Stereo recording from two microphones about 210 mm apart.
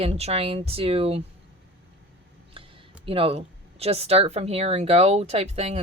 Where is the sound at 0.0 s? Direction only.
30° right (ahead or behind).